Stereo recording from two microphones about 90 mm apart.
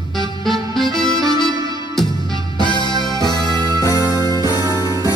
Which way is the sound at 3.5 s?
50° right (ahead or behind).